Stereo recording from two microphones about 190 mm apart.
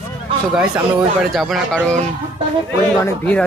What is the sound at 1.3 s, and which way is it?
Speech, centre (ahead or behind).